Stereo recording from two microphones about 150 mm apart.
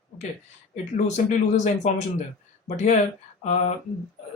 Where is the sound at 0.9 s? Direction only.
50° left (ahead or behind).